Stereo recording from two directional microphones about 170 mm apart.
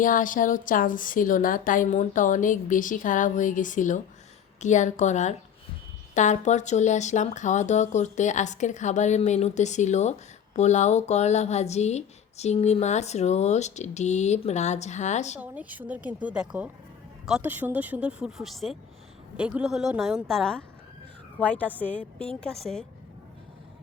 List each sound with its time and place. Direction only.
0.0 s speech: 50° left (ahead or behind)
15.4 s a woman's voice: 10° right (ahead or behind)